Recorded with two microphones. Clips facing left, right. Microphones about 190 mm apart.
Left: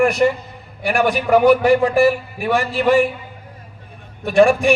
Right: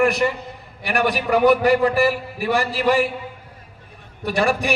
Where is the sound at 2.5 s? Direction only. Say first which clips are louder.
Left 4 dB; 40° right (ahead or behind).